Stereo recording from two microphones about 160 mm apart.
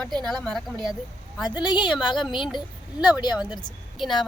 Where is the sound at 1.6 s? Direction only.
30° left (ahead or behind).